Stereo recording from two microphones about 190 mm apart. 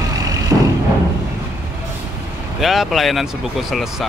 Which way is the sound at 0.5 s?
10° right (ahead or behind).